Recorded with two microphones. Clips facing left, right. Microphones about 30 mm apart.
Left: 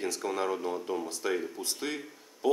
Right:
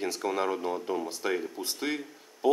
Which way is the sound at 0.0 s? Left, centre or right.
Centre.